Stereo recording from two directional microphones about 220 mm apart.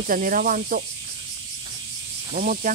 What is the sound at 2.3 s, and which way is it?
Speech, 40° right (ahead or behind).